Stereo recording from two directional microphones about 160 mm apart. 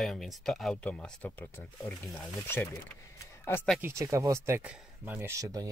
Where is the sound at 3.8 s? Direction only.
20° right (ahead or behind).